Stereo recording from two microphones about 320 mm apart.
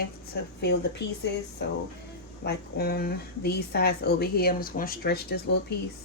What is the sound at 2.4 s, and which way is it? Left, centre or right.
Speech, left.